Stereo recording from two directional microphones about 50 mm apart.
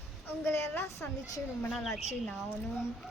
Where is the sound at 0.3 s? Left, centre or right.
Left.